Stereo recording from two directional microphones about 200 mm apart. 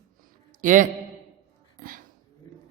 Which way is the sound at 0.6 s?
40° right (ahead or behind).